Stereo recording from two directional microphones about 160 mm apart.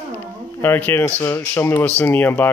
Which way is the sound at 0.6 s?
15° left (ahead or behind).